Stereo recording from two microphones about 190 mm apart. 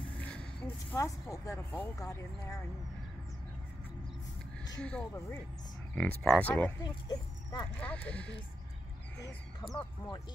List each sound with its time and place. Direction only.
0.2 s a sound: 5° left (ahead or behind)
1.3 s speech: 15° left (ahead or behind)
4.8 s speech: 10° left (ahead or behind)
6.8 s speech: 20° left (ahead or behind)
7.8 s speech: 5° left (ahead or behind)
9.8 s speech: 20° left (ahead or behind)